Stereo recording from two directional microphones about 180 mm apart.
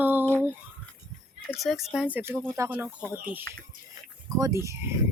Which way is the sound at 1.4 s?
Centre (ahead or behind).